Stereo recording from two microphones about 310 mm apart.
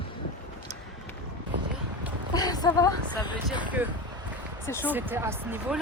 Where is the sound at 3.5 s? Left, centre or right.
Centre.